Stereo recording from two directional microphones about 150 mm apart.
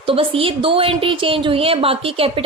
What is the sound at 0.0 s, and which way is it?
A woman's voice, 35° right (ahead or behind).